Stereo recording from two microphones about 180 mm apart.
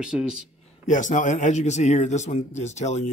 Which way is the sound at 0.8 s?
45° left (ahead or behind).